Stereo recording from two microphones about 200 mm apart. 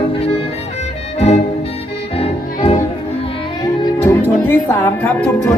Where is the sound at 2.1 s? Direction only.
30° left (ahead or behind).